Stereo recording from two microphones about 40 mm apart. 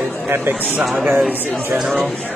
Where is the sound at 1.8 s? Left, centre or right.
Centre.